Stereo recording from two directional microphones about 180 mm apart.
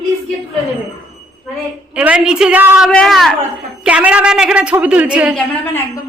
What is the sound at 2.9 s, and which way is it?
A man's voice, 5° left (ahead or behind).